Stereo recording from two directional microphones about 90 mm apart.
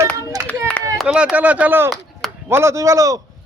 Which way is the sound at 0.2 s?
35° right (ahead or behind).